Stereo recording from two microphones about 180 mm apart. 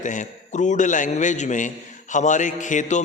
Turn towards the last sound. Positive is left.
turn(degrees=45)  # may be behind; listen again after turning